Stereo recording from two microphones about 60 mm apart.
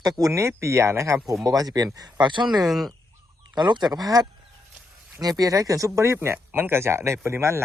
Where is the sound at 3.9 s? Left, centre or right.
Right.